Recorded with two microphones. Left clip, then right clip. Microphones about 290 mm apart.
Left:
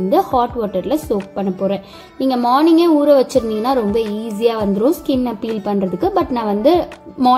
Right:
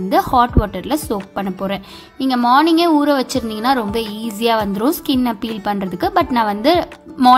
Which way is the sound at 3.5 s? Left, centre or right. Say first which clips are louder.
Even; right.